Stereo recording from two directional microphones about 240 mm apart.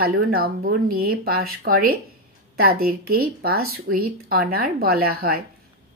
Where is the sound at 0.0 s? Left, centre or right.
Right.